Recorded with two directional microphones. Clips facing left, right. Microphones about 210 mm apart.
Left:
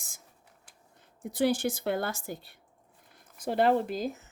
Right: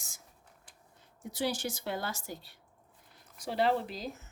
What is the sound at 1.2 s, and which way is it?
Speech, 55° left (ahead or behind).